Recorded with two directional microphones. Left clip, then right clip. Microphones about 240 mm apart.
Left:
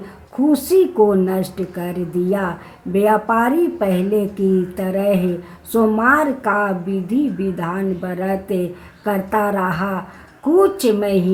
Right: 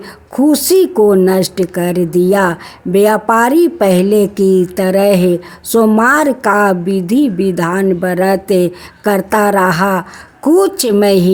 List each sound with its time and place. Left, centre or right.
0.3 s speech: right